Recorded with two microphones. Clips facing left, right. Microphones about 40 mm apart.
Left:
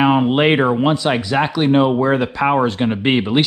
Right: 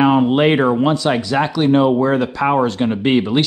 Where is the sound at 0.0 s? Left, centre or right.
Centre.